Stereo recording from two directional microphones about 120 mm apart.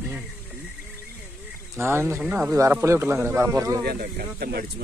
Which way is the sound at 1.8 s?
20° right (ahead or behind).